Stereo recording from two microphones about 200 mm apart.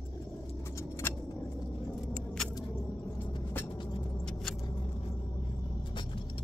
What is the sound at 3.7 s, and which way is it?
Vehicle, 25° left (ahead or behind).